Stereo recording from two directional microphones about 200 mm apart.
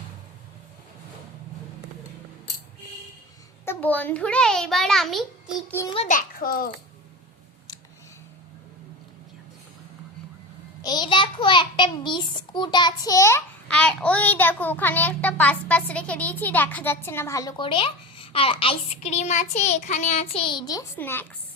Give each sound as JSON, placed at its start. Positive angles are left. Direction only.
{"t": 3.7, "sound": "a child's voice", "side_deg": 10}
{"t": 5.9, "sound": "a child's voice", "side_deg": 30}
{"t": 6.1, "sound": "a child's voice", "side_deg": 45}
{"t": 10.8, "sound": "a child's voice", "side_deg": 20}